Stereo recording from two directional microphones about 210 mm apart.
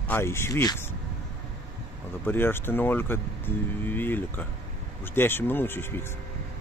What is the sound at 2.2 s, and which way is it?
Speech, 10° left (ahead or behind).